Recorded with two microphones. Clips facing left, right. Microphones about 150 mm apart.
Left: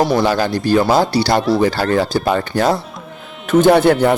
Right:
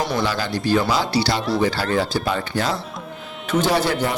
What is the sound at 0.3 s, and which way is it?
Speech, 50° left (ahead or behind).